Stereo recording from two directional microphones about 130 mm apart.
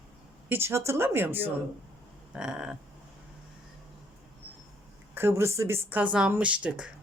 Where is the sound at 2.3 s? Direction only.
5° right (ahead or behind).